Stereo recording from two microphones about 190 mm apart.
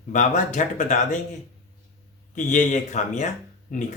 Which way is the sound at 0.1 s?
40° left (ahead or behind).